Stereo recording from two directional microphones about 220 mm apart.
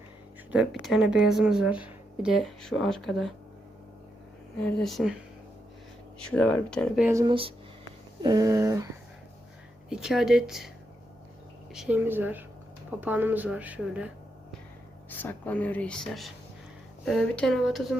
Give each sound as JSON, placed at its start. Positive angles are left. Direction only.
{"t": 0.5, "sound": "speech", "side_deg": 0}
{"t": 4.6, "sound": "speech", "side_deg": 0}
{"t": 7.0, "sound": "speech", "side_deg": -15}
{"t": 9.9, "sound": "speech", "side_deg": 0}
{"t": 11.7, "sound": "speech", "side_deg": -5}
{"t": 15.1, "sound": "speech", "side_deg": 10}